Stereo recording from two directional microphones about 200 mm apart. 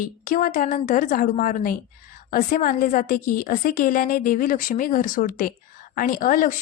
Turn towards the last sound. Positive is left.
turn(degrees=40)  # may be behind; listen again after turning